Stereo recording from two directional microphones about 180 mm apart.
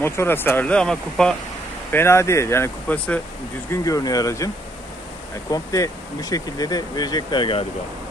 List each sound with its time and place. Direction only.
0.0 s speech: 15° left (ahead or behind)
5.5 s speech: 20° left (ahead or behind)